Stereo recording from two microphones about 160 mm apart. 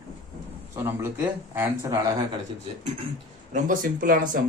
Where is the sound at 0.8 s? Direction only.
15° right (ahead or behind).